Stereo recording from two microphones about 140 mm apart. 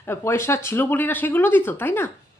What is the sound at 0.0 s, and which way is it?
A woman's voice, 20° left (ahead or behind).